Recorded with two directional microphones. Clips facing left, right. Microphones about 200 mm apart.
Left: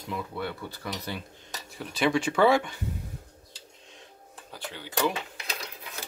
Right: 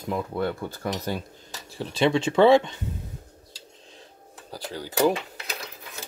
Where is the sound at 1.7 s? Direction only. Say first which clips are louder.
Right 3 dB; 30° right (ahead or behind).